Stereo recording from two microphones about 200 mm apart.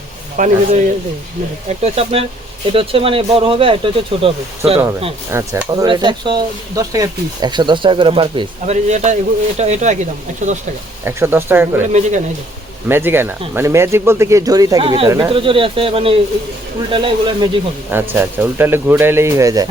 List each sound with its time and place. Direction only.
0.3 s speech: 40° right (ahead or behind)
1.8 s speech: 30° right (ahead or behind)
5.3 s speech: 15° right (ahead or behind); by 10.0 s 35° right (ahead or behind)
11.0 s speech: 10° right (ahead or behind)
11.9 s speech: 35° right (ahead or behind)
12.9 s speech: 10° right (ahead or behind)
17.9 s speech: 10° right (ahead or behind)